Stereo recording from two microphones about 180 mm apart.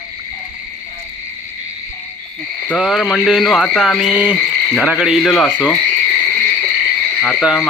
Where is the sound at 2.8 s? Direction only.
Centre (ahead or behind).